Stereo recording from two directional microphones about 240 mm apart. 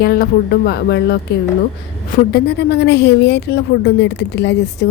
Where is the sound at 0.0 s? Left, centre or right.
Left.